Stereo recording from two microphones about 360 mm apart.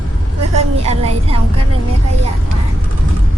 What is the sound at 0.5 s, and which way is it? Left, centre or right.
Speech, centre.